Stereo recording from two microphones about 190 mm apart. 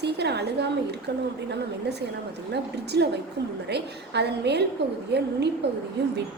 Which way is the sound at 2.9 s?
60° right (ahead or behind).